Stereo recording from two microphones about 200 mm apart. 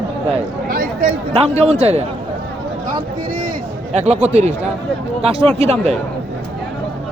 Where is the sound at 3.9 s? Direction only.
35° right (ahead or behind).